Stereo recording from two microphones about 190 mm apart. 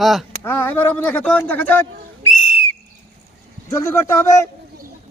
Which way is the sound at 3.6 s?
15° left (ahead or behind).